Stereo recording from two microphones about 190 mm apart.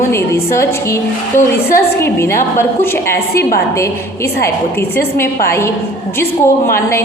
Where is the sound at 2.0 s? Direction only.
15° left (ahead or behind).